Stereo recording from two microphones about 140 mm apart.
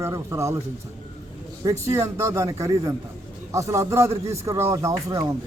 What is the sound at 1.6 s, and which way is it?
A man's voice, 20° right (ahead or behind).